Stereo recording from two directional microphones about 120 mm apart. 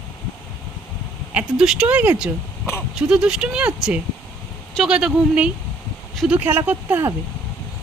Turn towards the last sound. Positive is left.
turn(degrees=-20)  # may be behind; listen again after turning